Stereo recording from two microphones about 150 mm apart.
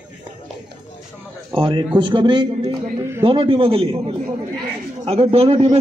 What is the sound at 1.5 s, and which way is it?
A man's voice, 30° right (ahead or behind).